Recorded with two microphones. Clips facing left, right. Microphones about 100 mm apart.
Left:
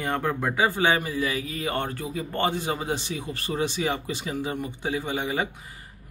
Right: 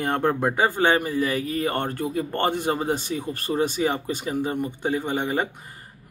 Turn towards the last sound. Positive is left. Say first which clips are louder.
# right 3 dB
turn(degrees=-50)  # may be behind; listen again after turning